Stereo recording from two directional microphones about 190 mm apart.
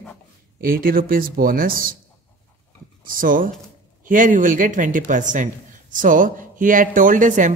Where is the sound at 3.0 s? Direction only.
45° right (ahead or behind).